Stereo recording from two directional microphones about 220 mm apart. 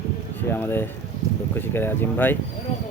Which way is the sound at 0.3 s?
10° left (ahead or behind).